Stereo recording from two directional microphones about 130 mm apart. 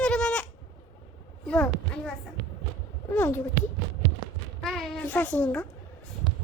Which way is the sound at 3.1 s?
15° left (ahead or behind).